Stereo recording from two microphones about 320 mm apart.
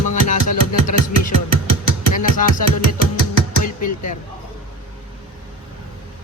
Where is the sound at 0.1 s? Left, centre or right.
Left.